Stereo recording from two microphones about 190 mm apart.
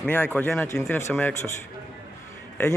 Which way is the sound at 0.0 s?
10° left (ahead or behind).